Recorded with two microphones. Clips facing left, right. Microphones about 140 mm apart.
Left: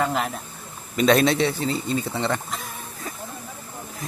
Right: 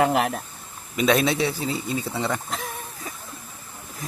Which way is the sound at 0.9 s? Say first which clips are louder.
Left 2 dB; 5° right (ahead or behind).